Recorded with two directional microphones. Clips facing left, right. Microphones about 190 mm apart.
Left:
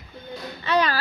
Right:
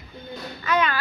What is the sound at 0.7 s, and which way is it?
Speech, 35° left (ahead or behind).